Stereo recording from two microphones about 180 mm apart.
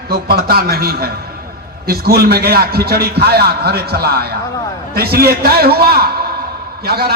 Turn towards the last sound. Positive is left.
turn(degrees=-60)  # may be behind; listen again after turning